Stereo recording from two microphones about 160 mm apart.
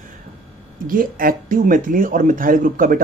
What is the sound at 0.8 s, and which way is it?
Speech, 60° right (ahead or behind).